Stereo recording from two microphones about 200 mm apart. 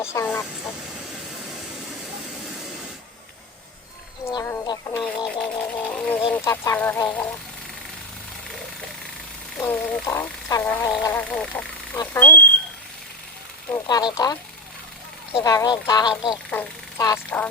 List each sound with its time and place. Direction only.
0.0 s music: 15° left (ahead or behind)
4.3 s speech: 20° left (ahead or behind)
5.0 s music: 5° left (ahead or behind)
9.6 s speech: 5° left (ahead or behind)
10.1 s music: 10° left (ahead or behind)
13.7 s speech: 20° left (ahead or behind)
16.5 s speech: 10° left (ahead or behind)
17.1 s music: 10° left (ahead or behind)